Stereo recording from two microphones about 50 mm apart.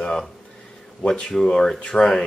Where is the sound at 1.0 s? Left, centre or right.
Centre.